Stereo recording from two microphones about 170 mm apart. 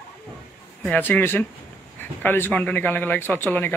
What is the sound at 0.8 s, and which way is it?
Speech, 10° left (ahead or behind).